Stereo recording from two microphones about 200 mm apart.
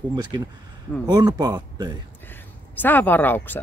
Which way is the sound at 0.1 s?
20° right (ahead or behind).